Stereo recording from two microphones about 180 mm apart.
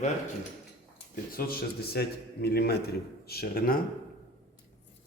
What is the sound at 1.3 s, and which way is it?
A man's voice, 55° left (ahead or behind).